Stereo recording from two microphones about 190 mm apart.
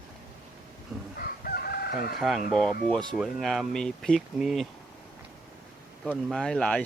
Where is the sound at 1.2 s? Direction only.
55° left (ahead or behind).